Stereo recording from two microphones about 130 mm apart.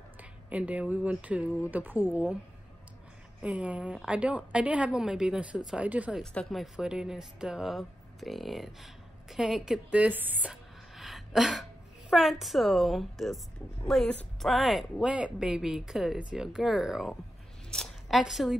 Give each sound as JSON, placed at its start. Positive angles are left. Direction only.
{"t": 0.2, "sound": "a woman's voice", "side_deg": -10}
{"t": 3.4, "sound": "a woman's voice", "side_deg": -10}
{"t": 6.3, "sound": "a woman's voice", "side_deg": 0}